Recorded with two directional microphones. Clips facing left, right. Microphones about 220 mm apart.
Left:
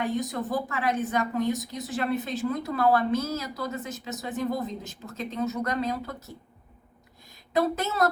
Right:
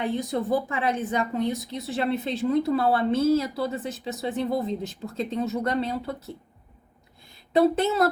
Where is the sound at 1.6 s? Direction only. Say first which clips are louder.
Right 2 dB; 30° right (ahead or behind).